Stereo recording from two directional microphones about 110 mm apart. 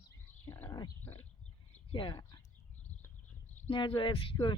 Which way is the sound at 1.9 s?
45° left (ahead or behind).